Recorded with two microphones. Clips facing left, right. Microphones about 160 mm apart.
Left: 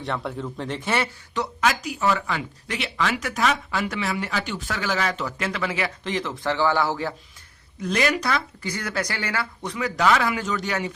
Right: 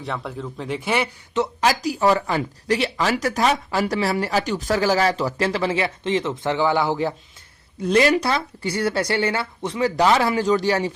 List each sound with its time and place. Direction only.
0.0 s a man's voice: centre (ahead or behind); by 1.5 s 20° right (ahead or behind)
1.6 s speech: 35° right (ahead or behind); by 7.1 s 20° right (ahead or behind)
7.8 s speech: 30° right (ahead or behind)